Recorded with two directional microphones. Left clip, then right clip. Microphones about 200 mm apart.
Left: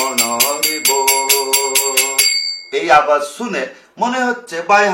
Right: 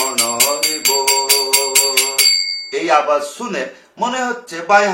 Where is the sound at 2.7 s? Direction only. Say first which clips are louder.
Left 3 dB; 10° left (ahead or behind).